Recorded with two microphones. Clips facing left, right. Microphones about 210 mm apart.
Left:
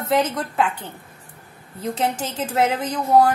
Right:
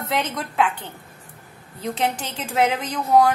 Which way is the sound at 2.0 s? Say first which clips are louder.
Left 2 dB; 5° left (ahead or behind).